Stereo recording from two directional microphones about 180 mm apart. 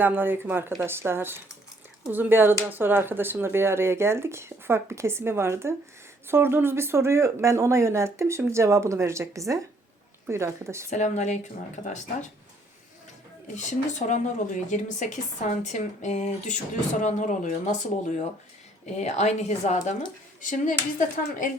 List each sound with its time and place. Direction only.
0.0 s speech: 10° right (ahead or behind)
10.8 s speech: 40° left (ahead or behind)
13.5 s speech: 40° left (ahead or behind)